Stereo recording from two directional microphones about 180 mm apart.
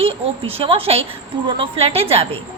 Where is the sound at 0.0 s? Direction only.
30° right (ahead or behind).